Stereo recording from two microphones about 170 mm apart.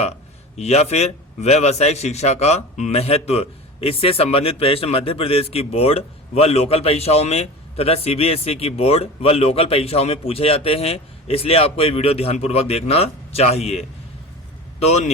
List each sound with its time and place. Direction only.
0.5 s a man's voice: 40° left (ahead or behind)